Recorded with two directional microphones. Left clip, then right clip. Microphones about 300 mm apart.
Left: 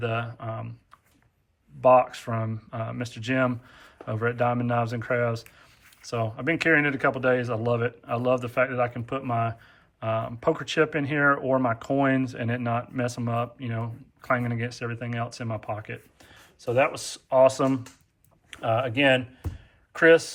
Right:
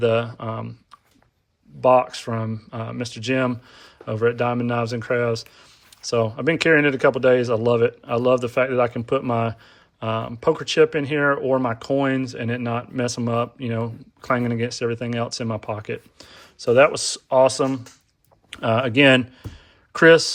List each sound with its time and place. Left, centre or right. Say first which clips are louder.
0.0 s speech: right 10 dB; centre
18.5 s speech: right 6 dB; right